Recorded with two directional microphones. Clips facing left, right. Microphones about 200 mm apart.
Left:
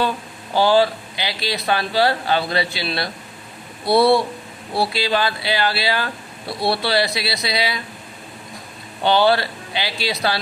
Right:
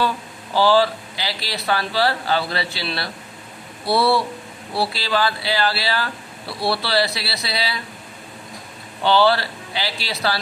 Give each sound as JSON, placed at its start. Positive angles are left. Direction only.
{"t": 0.6, "sound": "speech", "side_deg": 20}
{"t": 9.0, "sound": "speech", "side_deg": 20}